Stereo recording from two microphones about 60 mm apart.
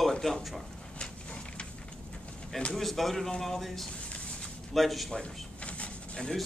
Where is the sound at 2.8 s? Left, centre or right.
Centre.